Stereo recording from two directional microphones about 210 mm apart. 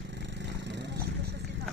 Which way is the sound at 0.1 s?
55° right (ahead or behind).